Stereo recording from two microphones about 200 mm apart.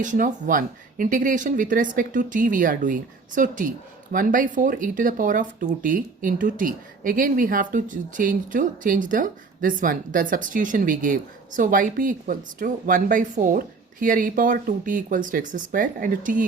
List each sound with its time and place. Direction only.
0.0 s speech: 40° right (ahead or behind)